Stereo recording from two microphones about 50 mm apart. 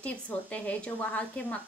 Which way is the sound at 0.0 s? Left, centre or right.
Left.